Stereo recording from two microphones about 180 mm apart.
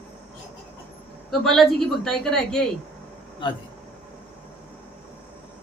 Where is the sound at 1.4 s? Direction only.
Centre (ahead or behind).